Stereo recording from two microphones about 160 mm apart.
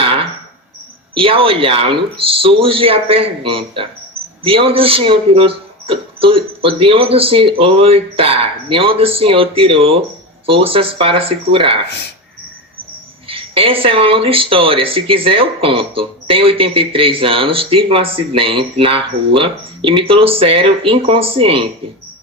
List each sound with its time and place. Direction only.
0.0 s a sound: 35° right (ahead or behind)
1.1 s speech: 35° right (ahead or behind)
13.2 s speech: 35° right (ahead or behind)